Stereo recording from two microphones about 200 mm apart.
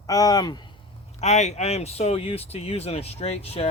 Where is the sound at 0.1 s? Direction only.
20° left (ahead or behind).